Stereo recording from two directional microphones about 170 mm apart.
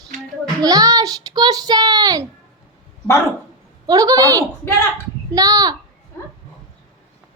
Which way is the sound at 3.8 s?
20° right (ahead or behind).